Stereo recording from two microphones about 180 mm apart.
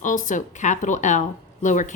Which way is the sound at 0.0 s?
45° left (ahead or behind).